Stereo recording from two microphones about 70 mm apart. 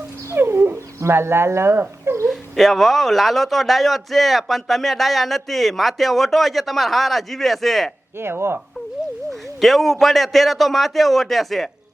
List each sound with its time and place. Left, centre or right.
0.3 s dog: right
2.2 s speech: centre
8.2 s speech: right
9.6 s speech: centre